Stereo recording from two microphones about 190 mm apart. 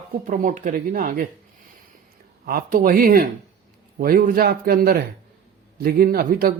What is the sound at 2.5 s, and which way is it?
A man's voice, 50° right (ahead or behind).